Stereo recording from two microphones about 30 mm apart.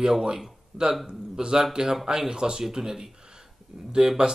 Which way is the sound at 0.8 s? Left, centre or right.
Right.